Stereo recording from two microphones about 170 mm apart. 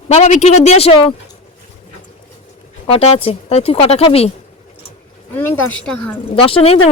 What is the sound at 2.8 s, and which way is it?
Speech, 35° left (ahead or behind).